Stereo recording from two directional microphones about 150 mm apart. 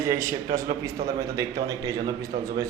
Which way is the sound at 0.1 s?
20° right (ahead or behind).